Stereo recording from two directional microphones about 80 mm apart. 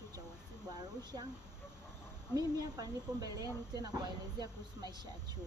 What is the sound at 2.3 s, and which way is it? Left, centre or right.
Speech, right.